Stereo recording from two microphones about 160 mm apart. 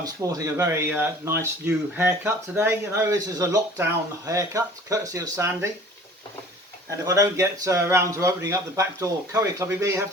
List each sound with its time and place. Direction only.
0.0 s speech: 20° right (ahead or behind)
7.0 s speech: 20° right (ahead or behind)